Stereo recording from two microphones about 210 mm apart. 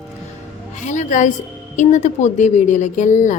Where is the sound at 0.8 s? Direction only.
35° left (ahead or behind).